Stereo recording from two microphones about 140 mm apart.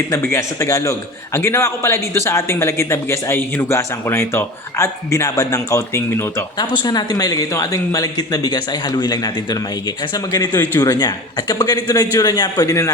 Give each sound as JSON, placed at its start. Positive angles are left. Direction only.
{"t": 0.3, "sound": "a man's voice", "side_deg": 20}